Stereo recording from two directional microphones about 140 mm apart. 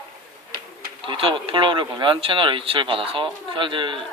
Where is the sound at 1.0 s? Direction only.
40° right (ahead or behind).